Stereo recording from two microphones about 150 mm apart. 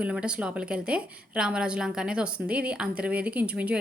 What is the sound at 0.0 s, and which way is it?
A woman's voice, 5° right (ahead or behind).